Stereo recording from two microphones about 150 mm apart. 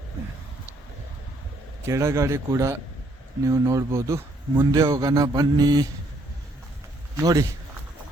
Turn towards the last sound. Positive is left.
turn(degrees=-25)  # may be behind; listen again after turning